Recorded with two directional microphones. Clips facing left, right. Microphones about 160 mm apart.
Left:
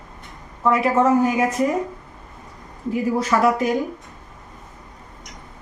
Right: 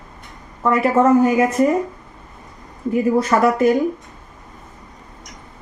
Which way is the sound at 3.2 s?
50° right (ahead or behind).